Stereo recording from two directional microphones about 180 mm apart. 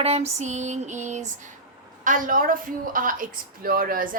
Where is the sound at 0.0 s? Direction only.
35° right (ahead or behind).